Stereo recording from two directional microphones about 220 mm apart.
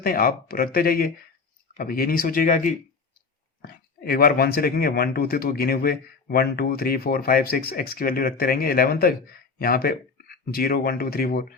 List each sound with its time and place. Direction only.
0.0 s speech: 40° left (ahead or behind)